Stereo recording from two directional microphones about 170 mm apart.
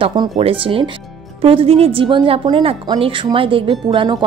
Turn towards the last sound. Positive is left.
turn(degrees=-25)  # may be behind; listen again after turning